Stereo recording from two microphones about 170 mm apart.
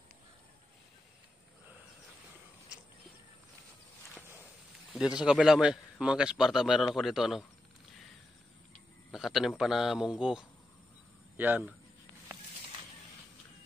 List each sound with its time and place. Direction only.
5.2 s a man's voice: 5° right (ahead or behind)
9.1 s a man's voice: centre (ahead or behind)